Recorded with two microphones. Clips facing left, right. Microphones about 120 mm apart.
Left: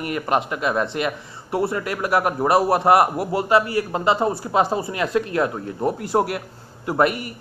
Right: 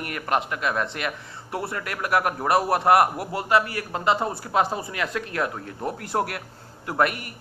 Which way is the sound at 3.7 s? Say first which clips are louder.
Left 9 dB; 25° left (ahead or behind).